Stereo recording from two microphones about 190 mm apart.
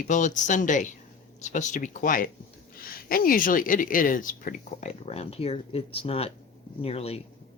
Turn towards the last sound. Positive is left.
turn(degrees=35)  # may be behind; listen again after turning